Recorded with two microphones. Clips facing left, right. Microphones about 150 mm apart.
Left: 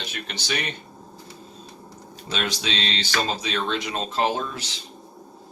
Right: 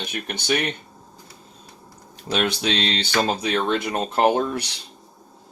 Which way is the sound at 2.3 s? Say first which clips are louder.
Right 5 dB; 60° right (ahead or behind).